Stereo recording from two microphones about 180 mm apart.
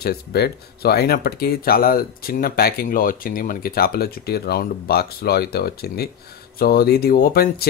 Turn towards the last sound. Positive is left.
turn(degrees=55)  # may be behind; listen again after turning